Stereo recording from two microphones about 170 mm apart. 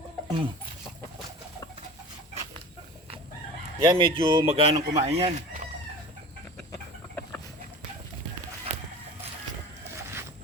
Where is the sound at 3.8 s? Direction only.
30° right (ahead or behind).